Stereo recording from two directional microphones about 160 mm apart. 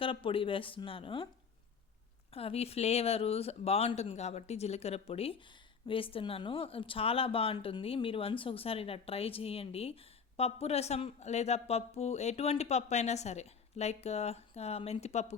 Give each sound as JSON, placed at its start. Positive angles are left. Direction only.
{"t": 0.0, "sound": "speech", "side_deg": 35}
{"t": 2.3, "sound": "speech", "side_deg": 40}